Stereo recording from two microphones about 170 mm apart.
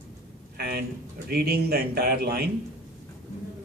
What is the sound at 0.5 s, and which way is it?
Speech, 70° right (ahead or behind).